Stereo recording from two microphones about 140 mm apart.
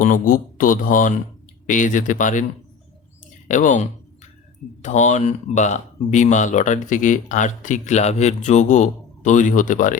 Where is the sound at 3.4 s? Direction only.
65° left (ahead or behind).